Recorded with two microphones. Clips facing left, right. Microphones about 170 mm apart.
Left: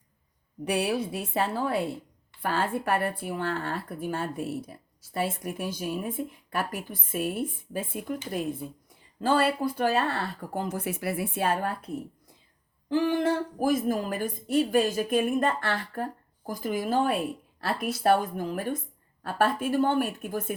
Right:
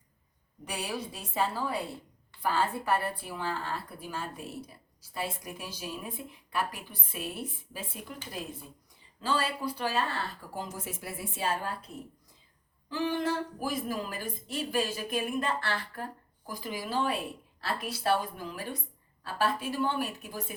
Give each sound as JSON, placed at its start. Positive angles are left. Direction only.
{"t": 0.6, "sound": "speech", "side_deg": 65}
{"t": 9.2, "sound": "speech", "side_deg": 55}
{"t": 12.9, "sound": "speech", "side_deg": 50}